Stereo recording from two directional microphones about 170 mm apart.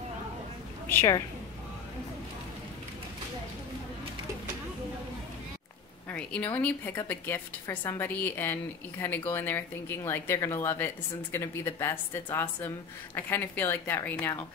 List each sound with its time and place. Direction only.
0.8 s a woman's voice: 15° left (ahead or behind)
6.0 s a woman's voice: 10° left (ahead or behind)